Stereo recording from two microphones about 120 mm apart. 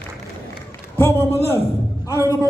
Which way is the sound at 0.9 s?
20° left (ahead or behind).